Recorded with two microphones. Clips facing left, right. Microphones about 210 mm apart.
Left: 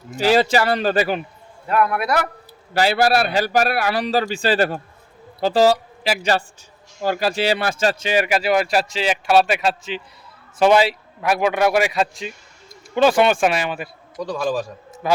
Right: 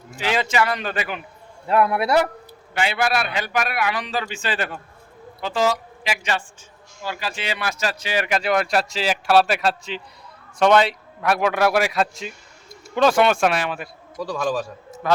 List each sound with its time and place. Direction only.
0.2 s a man's voice: 35° left (ahead or behind)
1.6 s a man's voice: 25° right (ahead or behind)
2.7 s a man's voice: 35° left (ahead or behind); by 14.6 s centre (ahead or behind)